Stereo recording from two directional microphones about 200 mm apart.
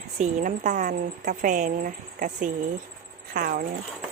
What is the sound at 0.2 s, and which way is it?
A woman's voice, 40° right (ahead or behind).